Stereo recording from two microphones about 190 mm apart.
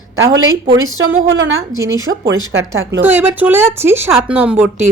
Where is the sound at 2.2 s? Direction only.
75° right (ahead or behind).